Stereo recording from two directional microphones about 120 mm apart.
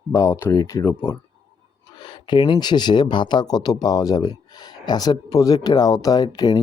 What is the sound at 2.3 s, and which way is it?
Speech, 40° left (ahead or behind).